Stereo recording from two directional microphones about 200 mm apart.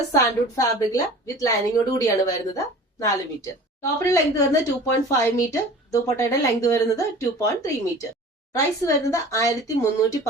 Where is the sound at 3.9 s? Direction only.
15° left (ahead or behind).